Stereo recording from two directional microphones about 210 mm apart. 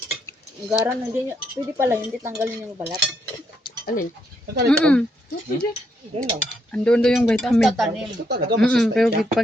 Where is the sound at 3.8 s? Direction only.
40° left (ahead or behind).